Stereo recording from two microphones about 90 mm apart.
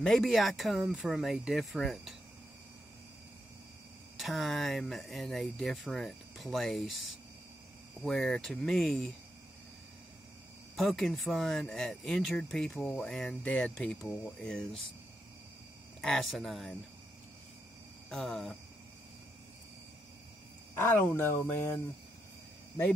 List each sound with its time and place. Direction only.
0.0 s speech: 5° left (ahead or behind)
4.2 s speech: centre (ahead or behind)
8.0 s speech: 10° left (ahead or behind)
10.8 s speech: centre (ahead or behind)
16.0 s speech: 5° left (ahead or behind)
18.1 s speech: 5° left (ahead or behind)
20.7 s speech: 25° left (ahead or behind)